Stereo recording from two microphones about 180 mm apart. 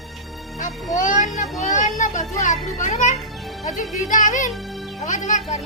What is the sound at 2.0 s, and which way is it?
A woman's voice, 45° left (ahead or behind).